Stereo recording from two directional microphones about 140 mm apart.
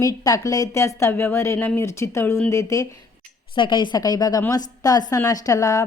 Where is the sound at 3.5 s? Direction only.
35° left (ahead or behind).